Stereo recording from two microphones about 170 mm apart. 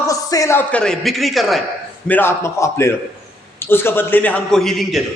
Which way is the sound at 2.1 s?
15° left (ahead or behind).